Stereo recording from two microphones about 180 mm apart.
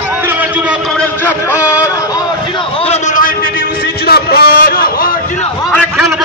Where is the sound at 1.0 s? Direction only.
10° left (ahead or behind); by 5.4 s 50° left (ahead or behind).